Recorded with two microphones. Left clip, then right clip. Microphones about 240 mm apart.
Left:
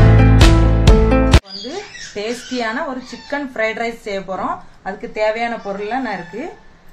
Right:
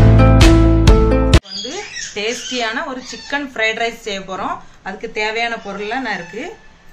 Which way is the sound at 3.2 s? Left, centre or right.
Left.